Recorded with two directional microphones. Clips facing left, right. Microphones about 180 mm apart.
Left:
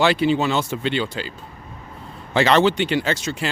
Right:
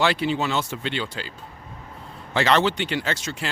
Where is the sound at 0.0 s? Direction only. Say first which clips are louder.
Left 5 dB; 20° left (ahead or behind).